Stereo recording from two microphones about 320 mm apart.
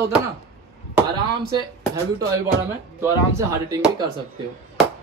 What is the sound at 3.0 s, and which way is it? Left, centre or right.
Speech, centre.